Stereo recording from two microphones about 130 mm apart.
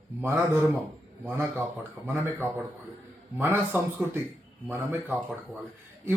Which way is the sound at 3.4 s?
15° right (ahead or behind).